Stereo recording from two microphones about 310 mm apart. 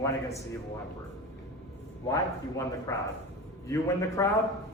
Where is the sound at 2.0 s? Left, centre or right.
Centre.